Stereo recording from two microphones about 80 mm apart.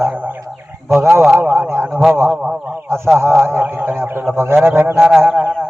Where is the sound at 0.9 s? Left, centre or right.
Centre.